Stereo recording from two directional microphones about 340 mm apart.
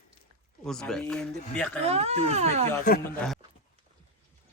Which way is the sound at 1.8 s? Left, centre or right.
Centre.